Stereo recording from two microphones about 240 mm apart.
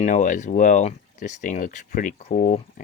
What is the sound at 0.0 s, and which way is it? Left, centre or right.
Speech, left.